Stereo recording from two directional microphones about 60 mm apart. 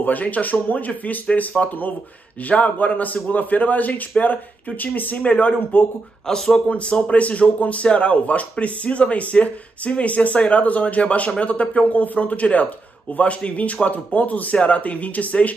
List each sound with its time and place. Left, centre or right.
0.0 s speech: left
6.2 s speech: centre
6.7 s speech: centre